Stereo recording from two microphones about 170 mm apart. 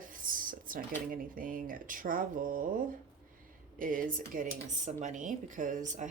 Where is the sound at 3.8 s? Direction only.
55° right (ahead or behind).